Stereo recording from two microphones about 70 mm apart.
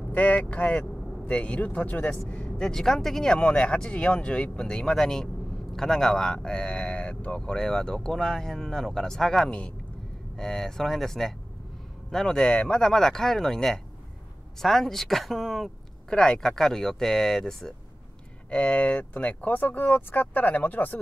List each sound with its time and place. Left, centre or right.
0.1 s speech: left; by 17.7 s centre
18.5 s speech: centre